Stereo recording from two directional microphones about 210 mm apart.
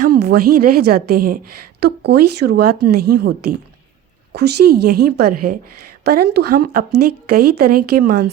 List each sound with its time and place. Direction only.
0.0 s speech: 45° right (ahead or behind)